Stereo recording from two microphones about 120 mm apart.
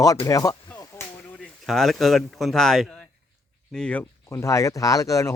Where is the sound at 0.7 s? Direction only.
25° left (ahead or behind).